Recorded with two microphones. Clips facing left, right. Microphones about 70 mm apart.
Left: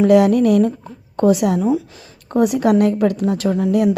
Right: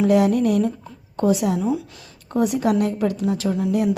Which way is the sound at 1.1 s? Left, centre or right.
Left.